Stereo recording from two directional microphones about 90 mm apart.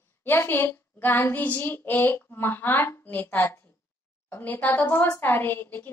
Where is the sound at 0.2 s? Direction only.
25° left (ahead or behind).